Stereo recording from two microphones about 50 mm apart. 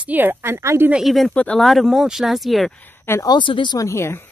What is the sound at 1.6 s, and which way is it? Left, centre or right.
Speech, centre.